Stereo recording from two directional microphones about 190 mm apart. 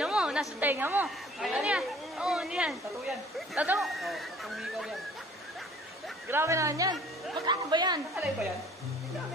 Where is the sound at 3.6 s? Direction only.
5° right (ahead or behind).